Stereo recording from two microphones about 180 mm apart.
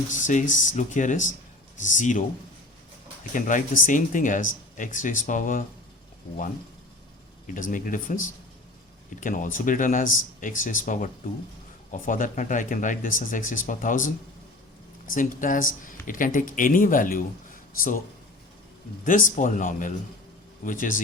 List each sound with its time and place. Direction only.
0.3 s speech: 45° left (ahead or behind)
3.3 s speech: 45° left (ahead or behind)
7.5 s speech: 50° left (ahead or behind)
15.1 s speech: 45° left (ahead or behind)
19.0 s speech: 50° left (ahead or behind)